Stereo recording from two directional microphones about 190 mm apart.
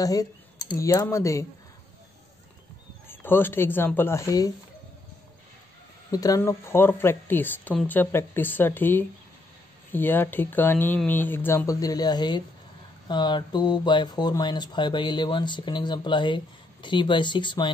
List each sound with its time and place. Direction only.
0.0 s speech: 20° left (ahead or behind)
3.1 s speech: 10° left (ahead or behind)
6.1 s speech: 20° left (ahead or behind)